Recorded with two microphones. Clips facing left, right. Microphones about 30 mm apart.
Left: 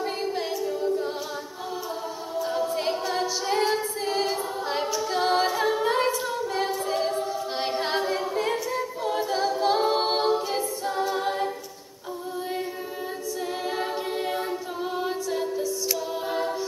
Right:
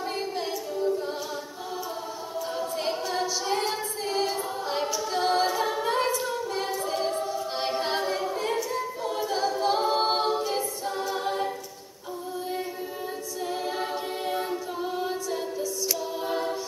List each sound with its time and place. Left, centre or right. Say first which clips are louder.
0.0 s singing: left 2 dB; centre
2.3 s a capella: left 4 dB; centre
13.7 s a capella: left 2 dB; centre
15.0 s music: left 4 dB; centre
16.3 s choir: left 1 dB; centre